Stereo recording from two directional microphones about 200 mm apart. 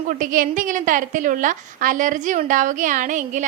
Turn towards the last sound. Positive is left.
turn(degrees=-40)  # may be behind; listen again after turning